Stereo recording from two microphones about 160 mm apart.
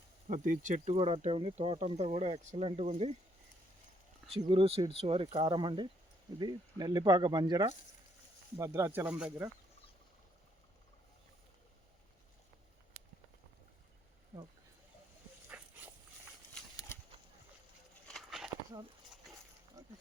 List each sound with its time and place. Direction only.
0.3 s speech: 50° right (ahead or behind)
0.9 s speech: 40° right (ahead or behind)
4.3 s speech: 35° right (ahead or behind); by 9.5 s 10° right (ahead or behind)
15.4 s dog: 10° right (ahead or behind)
16.7 s a sound: 15° left (ahead or behind)
18.1 s a sound: centre (ahead or behind)
19.8 s pig: 20° right (ahead or behind)